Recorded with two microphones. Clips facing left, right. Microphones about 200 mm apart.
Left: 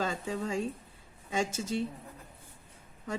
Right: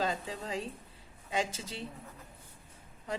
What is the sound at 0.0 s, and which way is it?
A woman's voice, 45° left (ahead or behind).